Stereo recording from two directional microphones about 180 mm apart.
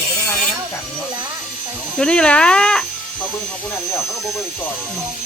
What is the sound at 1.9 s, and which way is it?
Speech, 5° left (ahead or behind).